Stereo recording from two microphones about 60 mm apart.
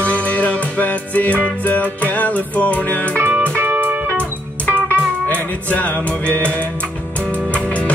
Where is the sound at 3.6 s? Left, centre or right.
Right.